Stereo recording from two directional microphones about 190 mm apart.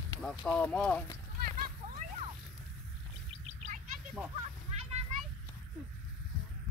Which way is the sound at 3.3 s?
35° right (ahead or behind).